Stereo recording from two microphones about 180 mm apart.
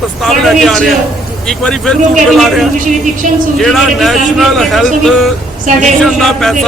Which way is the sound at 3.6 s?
Centre (ahead or behind).